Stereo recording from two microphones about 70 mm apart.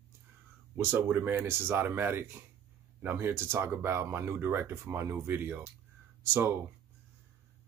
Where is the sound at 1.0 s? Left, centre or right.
Right.